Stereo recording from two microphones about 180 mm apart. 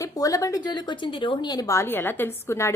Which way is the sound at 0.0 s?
20° left (ahead or behind).